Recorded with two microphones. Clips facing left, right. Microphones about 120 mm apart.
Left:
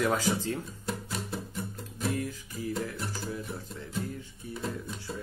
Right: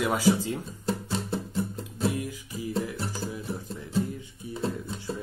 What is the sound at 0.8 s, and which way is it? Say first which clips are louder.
Music: right 8 dB; 30° right (ahead or behind).